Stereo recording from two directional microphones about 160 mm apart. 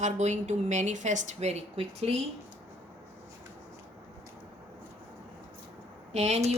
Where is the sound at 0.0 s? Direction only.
45° right (ahead or behind).